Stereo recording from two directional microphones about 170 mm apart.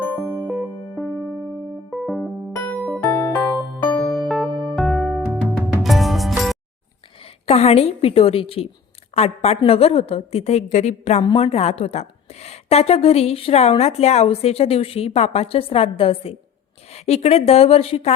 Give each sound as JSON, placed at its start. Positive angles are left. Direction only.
{"t": 0.0, "sound": "music", "side_deg": 10}
{"t": 7.4, "sound": "a woman's voice", "side_deg": 35}
{"t": 11.2, "sound": "a woman's voice", "side_deg": 30}